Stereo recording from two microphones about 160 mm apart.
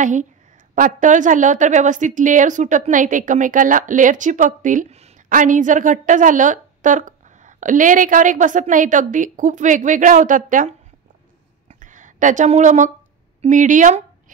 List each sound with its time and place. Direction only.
0.0 s a woman's voice: 50° right (ahead or behind)
11.8 s a woman's voice: 50° right (ahead or behind)